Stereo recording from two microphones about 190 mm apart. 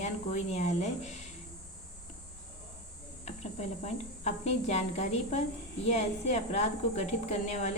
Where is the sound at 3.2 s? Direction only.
35° left (ahead or behind).